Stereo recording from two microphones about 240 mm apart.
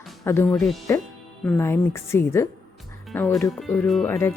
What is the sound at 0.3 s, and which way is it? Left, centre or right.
Speech, centre.